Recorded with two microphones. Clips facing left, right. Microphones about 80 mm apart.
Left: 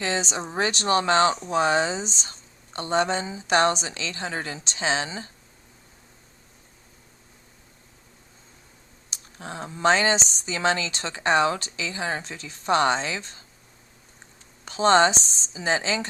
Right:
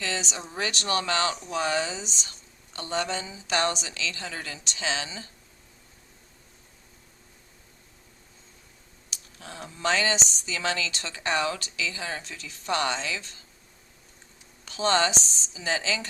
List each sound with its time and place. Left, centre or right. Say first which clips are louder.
0.0 s speech: left 5 dB; left
9.0 s speech: left 6 dB; left
14.6 s speech: left 6 dB; left